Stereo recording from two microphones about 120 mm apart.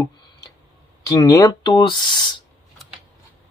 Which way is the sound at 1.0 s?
30° left (ahead or behind).